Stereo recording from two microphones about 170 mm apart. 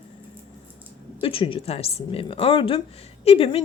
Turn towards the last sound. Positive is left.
turn(degrees=35)  # may be behind; listen again after turning